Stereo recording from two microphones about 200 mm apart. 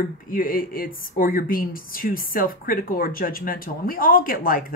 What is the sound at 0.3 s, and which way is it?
Speech, 45° left (ahead or behind).